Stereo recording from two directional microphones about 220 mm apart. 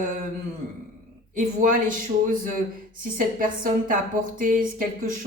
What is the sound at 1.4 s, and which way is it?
Speech, 35° right (ahead or behind).